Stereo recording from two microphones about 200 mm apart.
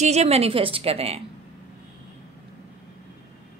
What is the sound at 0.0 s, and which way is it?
A woman's voice, 35° right (ahead or behind).